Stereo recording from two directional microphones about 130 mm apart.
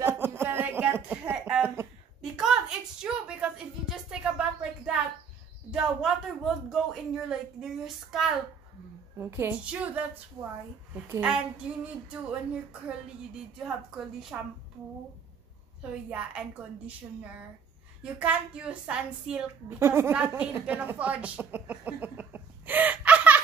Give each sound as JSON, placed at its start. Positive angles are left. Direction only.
{"t": 0.0, "sound": "a sound", "side_deg": -20}
{"t": 2.3, "sound": "a sound", "side_deg": -5}
{"t": 9.2, "sound": "a woman's voice", "side_deg": -15}
{"t": 11.1, "sound": "a woman's voice", "side_deg": -10}
{"t": 14.3, "sound": "a woman's voice", "side_deg": -10}
{"t": 15.8, "sound": "a woman's voice", "side_deg": -10}